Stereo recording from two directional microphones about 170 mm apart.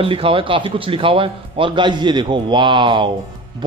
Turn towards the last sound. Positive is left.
turn(degrees=-30)  # may be behind; listen again after turning